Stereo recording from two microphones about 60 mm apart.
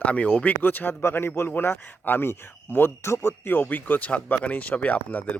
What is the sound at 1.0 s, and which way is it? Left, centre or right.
A man's voice, left.